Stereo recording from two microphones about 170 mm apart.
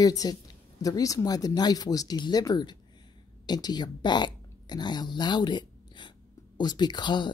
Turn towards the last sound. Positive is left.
turn(degrees=25)  # may be behind; listen again after turning